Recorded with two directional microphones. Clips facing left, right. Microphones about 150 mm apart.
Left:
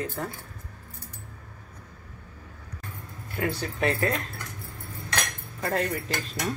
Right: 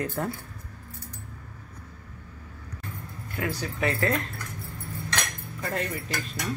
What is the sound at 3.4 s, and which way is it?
Speech, 30° left (ahead or behind).